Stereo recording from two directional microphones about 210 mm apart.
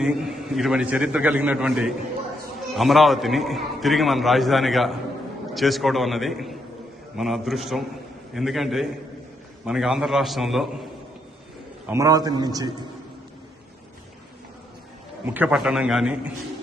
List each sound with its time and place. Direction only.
0.0 s a man's voice: centre (ahead or behind)
11.9 s a man's voice: 15° right (ahead or behind)
15.3 s a man's voice: 5° right (ahead or behind)